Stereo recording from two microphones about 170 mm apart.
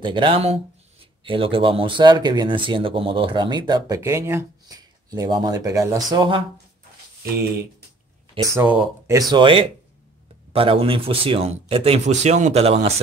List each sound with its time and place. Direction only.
0.0 s a man's voice: 30° right (ahead or behind)
8.5 s speech: 10° right (ahead or behind)
9.3 s a man's voice: 30° right (ahead or behind)